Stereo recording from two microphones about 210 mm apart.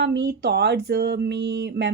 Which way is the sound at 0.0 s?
50° right (ahead or behind).